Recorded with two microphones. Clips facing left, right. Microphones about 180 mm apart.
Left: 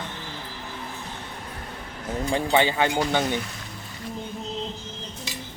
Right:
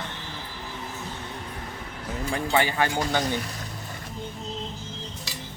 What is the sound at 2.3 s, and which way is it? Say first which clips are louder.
Speech: left 3 dB; 20° left (ahead or behind).